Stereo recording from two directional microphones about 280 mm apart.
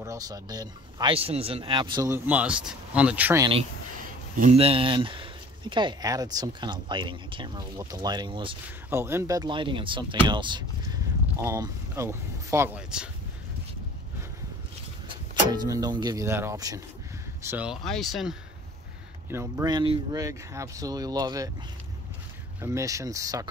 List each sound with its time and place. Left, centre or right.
0.0 s speech: centre
15.5 s speech: centre
22.6 s speech: centre